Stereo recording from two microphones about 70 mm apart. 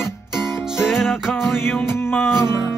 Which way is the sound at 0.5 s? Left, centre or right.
Centre.